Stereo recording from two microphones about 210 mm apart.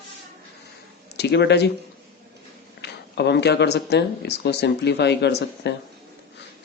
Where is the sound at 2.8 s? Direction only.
55° left (ahead or behind).